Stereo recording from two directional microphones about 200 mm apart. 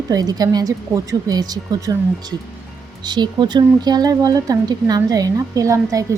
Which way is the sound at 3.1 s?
20° right (ahead or behind).